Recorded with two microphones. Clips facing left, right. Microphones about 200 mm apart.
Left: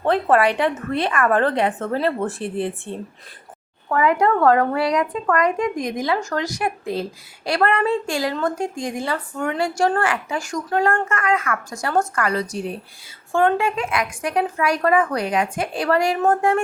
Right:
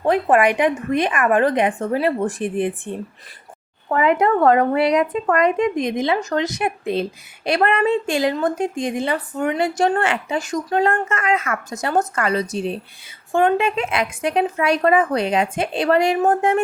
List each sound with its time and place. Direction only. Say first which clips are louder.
0.0 s speech: right 1 dB; 15° right (ahead or behind)